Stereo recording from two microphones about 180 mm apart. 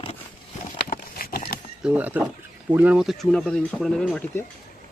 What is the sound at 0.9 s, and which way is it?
Horse, 55° left (ahead or behind).